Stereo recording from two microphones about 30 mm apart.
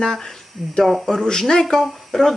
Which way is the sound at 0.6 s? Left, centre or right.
Centre.